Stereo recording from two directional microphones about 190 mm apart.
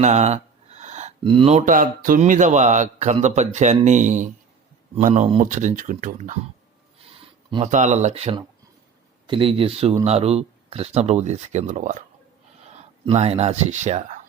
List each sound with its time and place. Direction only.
0.0 s speech: 35° right (ahead or behind)
7.5 s speech: 35° right (ahead or behind)
13.1 s speech: 35° right (ahead or behind)